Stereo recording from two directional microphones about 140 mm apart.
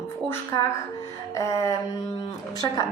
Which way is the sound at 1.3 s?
20° left (ahead or behind).